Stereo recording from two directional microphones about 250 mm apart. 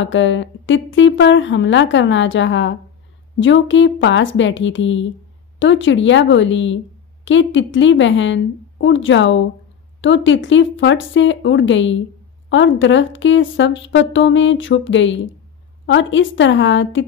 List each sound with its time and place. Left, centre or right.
0.0 s speech: left